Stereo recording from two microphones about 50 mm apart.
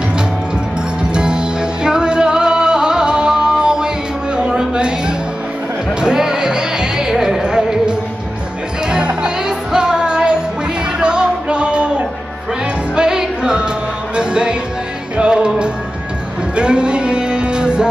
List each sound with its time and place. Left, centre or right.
1.1 s music: centre
4.4 s a sound: centre
5.9 s music: centre
12.9 s music: centre
16.5 s music: centre